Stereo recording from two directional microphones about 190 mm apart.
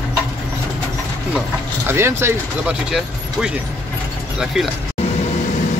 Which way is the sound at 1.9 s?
15° right (ahead or behind).